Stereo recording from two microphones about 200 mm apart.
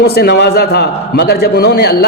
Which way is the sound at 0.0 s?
50° left (ahead or behind).